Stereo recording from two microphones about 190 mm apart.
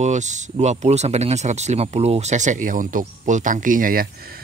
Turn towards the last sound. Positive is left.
turn(degrees=-50)  # may be behind; listen again after turning